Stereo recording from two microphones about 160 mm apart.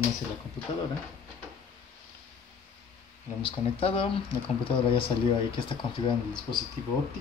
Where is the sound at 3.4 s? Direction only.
35° left (ahead or behind).